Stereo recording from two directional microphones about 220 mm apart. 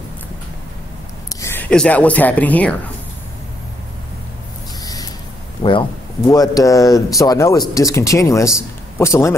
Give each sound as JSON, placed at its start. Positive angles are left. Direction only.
{"t": 1.4, "sound": "speech", "side_deg": 10}
{"t": 4.8, "sound": "a sound", "side_deg": 15}
{"t": 5.6, "sound": "a man's voice", "side_deg": 20}